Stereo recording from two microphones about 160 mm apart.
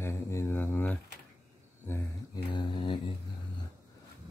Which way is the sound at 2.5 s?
30° left (ahead or behind).